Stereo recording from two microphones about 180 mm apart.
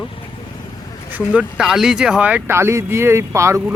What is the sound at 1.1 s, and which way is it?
Speech, 5° right (ahead or behind).